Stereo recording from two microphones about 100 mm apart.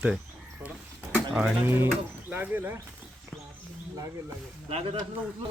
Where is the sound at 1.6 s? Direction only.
25° right (ahead or behind).